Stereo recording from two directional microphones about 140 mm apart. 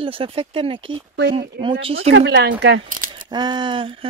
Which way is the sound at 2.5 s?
75° right (ahead or behind).